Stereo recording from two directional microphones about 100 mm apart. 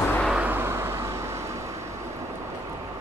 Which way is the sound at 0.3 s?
15° right (ahead or behind).